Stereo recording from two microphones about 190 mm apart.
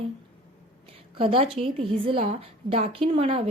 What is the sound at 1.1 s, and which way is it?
A woman's voice, 30° right (ahead or behind).